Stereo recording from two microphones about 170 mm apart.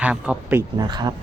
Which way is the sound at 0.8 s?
25° right (ahead or behind).